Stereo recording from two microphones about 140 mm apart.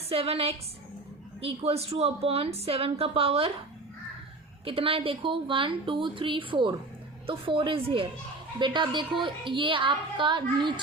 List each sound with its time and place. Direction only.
0.1 s a woman's voice: 45° right (ahead or behind)
4.6 s a woman's voice: 40° right (ahead or behind)